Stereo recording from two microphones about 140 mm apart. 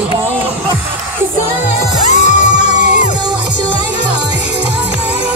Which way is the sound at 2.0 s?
60° left (ahead or behind).